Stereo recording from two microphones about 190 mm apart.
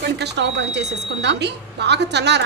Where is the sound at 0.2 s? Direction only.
65° right (ahead or behind).